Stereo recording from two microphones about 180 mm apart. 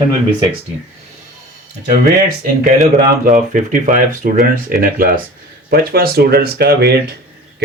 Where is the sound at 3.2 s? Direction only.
50° right (ahead or behind).